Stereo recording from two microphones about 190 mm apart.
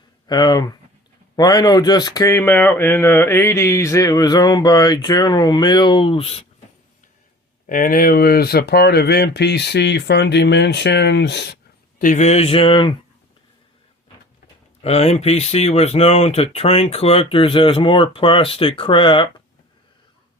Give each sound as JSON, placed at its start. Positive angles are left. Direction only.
{"t": 0.3, "sound": "speech", "side_deg": 20}
{"t": 7.7, "sound": "speech", "side_deg": 45}
{"t": 11.9, "sound": "speech", "side_deg": 40}
{"t": 14.8, "sound": "speech", "side_deg": 35}